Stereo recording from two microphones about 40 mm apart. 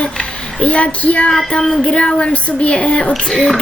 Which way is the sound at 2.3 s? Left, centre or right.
Left.